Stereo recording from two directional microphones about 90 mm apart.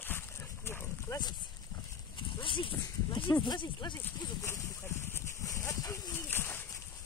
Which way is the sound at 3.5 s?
55° left (ahead or behind).